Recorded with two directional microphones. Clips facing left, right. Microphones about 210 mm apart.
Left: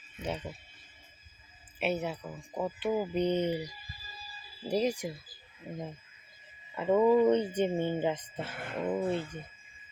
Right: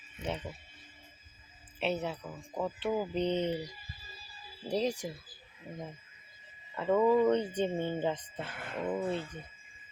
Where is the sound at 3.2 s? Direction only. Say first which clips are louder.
Left 2 dB; 20° right (ahead or behind).